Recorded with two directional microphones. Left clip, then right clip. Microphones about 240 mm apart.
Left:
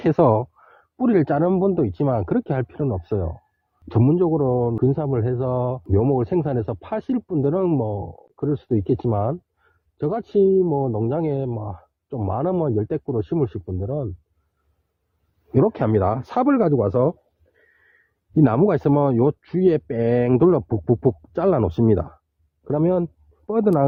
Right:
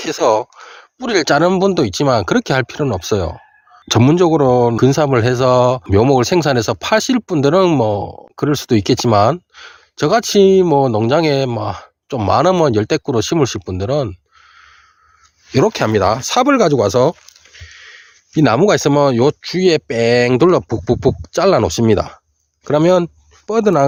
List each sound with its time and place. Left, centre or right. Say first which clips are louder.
0.1 s speech: right 4 dB; centre; by 7.9 s right
7.9 s speech: right 10 dB; right
15.5 s speech: right 5 dB; centre
18.3 s speech: right 6 dB; centre